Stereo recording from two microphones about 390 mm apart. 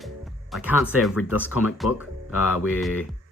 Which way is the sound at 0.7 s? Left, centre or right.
Left.